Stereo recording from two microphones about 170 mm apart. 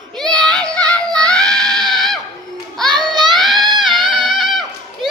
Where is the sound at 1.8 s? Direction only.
Centre (ahead or behind).